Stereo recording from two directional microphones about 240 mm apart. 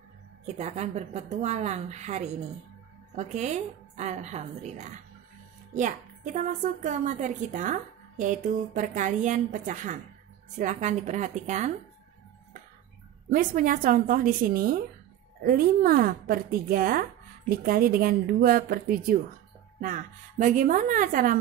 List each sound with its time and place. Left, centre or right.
0.6 s a woman's voice: right
13.3 s a woman's voice: right